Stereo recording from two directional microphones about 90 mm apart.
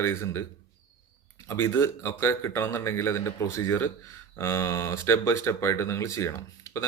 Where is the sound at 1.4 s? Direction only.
25° left (ahead or behind).